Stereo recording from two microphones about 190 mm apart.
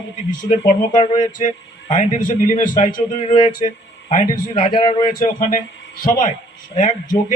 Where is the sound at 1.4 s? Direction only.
40° left (ahead or behind).